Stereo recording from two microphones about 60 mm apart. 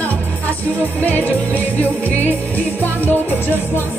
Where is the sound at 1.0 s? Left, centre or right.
Left.